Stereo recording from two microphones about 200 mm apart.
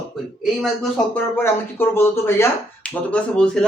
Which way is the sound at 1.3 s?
10° left (ahead or behind).